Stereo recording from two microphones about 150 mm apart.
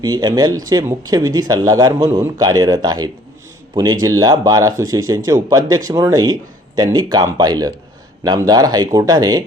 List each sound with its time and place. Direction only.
0.0 s speech: 25° right (ahead or behind)